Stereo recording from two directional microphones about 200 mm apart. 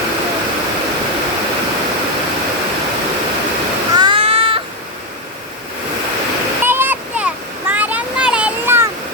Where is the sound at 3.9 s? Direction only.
20° right (ahead or behind).